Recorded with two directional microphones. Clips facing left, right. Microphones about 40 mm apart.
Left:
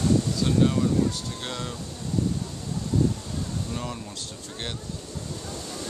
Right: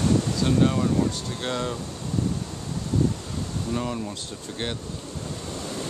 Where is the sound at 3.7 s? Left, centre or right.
Centre.